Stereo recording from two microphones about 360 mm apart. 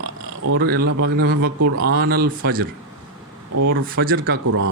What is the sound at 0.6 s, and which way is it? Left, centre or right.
Speech, right.